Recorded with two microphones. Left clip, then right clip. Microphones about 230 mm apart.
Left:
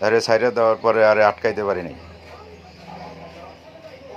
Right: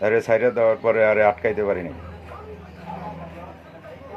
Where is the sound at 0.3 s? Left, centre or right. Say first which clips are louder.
Left 1 dB; left.